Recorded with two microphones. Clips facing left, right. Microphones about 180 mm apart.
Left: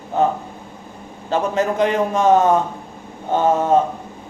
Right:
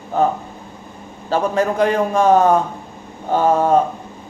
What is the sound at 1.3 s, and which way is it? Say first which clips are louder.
A man's voice: right 1 dB; 20° left (ahead or behind).